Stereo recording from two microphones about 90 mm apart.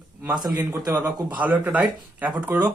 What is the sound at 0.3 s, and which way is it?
Speech, 50° right (ahead or behind).